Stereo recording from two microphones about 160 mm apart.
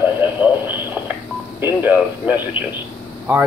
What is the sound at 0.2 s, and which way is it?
Radio, 15° right (ahead or behind).